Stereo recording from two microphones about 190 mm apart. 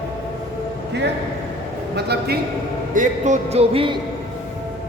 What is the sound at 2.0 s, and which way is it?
Speech, 55° right (ahead or behind).